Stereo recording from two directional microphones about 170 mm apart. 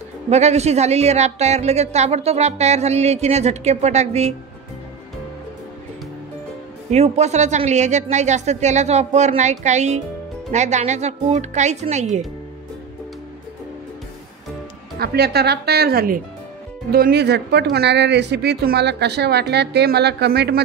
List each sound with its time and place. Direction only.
0.3 s a woman's voice: 40° right (ahead or behind)
6.9 s a woman's voice: 40° right (ahead or behind)
15.0 s speech: 70° right (ahead or behind)